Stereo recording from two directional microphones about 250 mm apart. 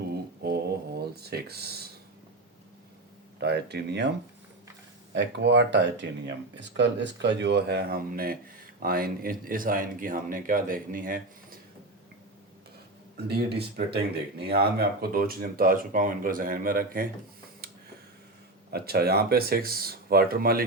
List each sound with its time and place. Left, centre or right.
0.4 s a sound: right
3.4 s speech: right
5.1 s speech: right
13.2 s speech: right
18.7 s speech: right